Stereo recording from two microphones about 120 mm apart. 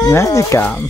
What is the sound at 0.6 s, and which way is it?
Speech, 15° left (ahead or behind).